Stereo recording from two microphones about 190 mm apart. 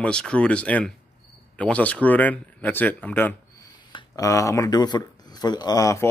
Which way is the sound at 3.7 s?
20° left (ahead or behind).